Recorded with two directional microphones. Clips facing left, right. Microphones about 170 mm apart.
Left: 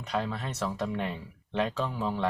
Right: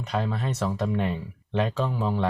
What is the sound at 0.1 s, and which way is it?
Speech, 15° right (ahead or behind).